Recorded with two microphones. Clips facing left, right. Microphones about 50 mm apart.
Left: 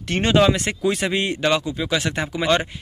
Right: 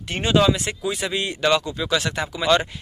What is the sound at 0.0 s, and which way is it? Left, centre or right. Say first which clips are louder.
Speech: left 1 dB; left.